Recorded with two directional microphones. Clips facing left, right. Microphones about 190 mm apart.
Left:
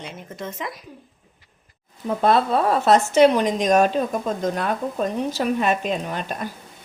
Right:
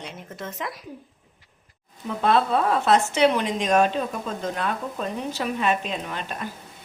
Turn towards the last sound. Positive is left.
turn(degrees=40)  # may be behind; listen again after turning